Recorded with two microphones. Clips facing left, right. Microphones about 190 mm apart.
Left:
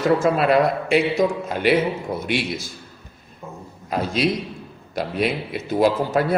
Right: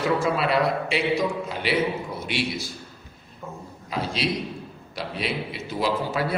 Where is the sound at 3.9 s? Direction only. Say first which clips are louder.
Left 5 dB; 50° left (ahead or behind).